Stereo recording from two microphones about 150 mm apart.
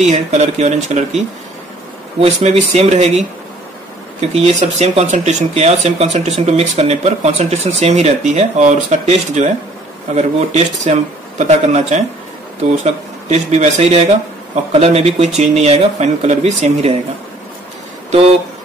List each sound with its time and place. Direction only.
0.1 s speech: 50° right (ahead or behind)
2.1 s speech: 45° right (ahead or behind)
4.3 s speech: 45° right (ahead or behind)